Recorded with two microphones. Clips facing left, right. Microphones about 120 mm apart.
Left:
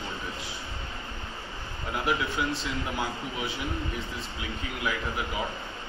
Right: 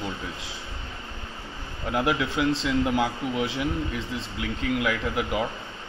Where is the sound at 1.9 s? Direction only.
90° right.